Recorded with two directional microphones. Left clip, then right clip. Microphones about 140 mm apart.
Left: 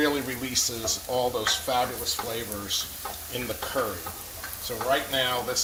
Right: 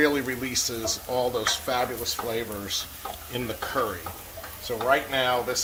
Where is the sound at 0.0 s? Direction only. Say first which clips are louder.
Right 3 dB; 45° right (ahead or behind).